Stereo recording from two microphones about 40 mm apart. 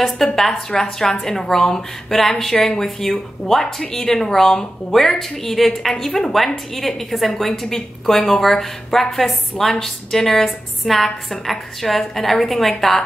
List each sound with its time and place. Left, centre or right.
0.0 s a woman's voice: centre
2.6 s a woman's voice: centre